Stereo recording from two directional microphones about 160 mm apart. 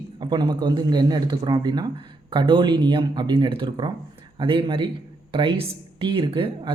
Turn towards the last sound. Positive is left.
turn(degrees=-35)  # may be behind; listen again after turning